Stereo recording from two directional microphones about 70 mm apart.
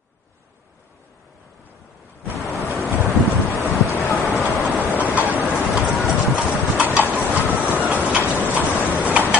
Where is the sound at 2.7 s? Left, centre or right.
Centre.